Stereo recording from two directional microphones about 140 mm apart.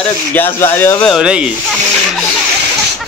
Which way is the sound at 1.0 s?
5° right (ahead or behind).